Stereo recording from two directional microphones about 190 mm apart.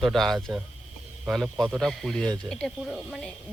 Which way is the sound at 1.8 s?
Centre (ahead or behind).